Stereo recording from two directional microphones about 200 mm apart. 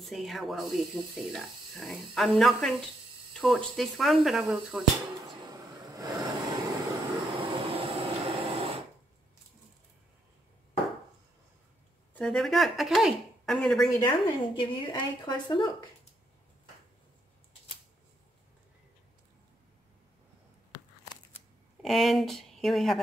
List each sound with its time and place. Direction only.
0.0 s speech: centre (ahead or behind)
5.4 s train: 20° right (ahead or behind)
8.5 s a sound: 30° right (ahead or behind)
12.1 s speech: 5° left (ahead or behind)
13.8 s a woman's voice: 20° left (ahead or behind)
21.8 s speech: centre (ahead or behind)